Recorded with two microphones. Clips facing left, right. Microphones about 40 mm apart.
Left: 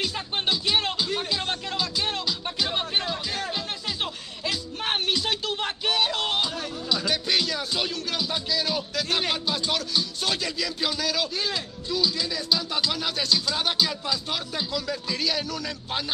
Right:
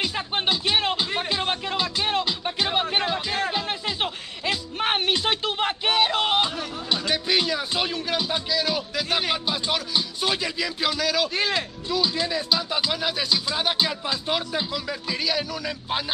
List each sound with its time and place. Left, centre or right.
0.0 s music: right
7.2 s speech: centre
8.3 s speech: centre
10.9 s speech: centre
12.0 s speech: right
13.7 s speech: right; by 16.0 s centre